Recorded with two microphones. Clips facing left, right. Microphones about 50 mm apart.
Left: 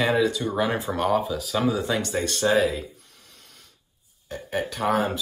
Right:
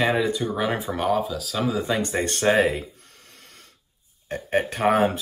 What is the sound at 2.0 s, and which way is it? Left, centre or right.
Speech, right.